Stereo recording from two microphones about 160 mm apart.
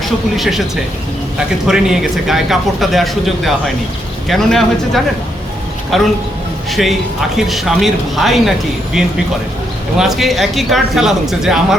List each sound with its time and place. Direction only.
0.0 s speech: centre (ahead or behind)
1.6 s speech: 5° right (ahead or behind)
5.9 s speech: centre (ahead or behind)